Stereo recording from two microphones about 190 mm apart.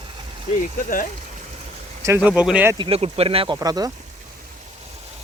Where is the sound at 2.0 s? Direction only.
15° right (ahead or behind).